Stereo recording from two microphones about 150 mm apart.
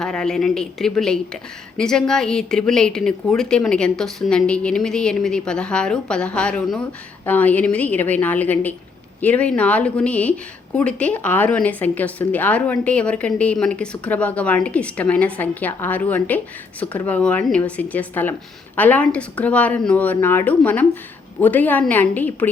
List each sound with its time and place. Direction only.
0.0 s a woman's voice: 5° left (ahead or behind)